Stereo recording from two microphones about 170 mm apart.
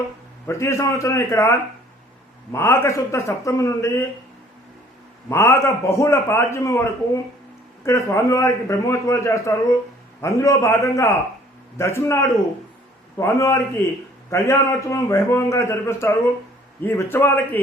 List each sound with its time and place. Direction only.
0.4 s a man's voice: 15° left (ahead or behind)
5.3 s a man's voice: 15° left (ahead or behind)